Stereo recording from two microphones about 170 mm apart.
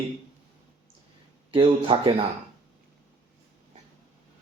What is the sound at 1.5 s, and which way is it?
Speech, 30° right (ahead or behind).